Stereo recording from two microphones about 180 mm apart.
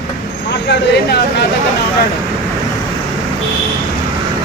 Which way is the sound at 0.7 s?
65° left (ahead or behind).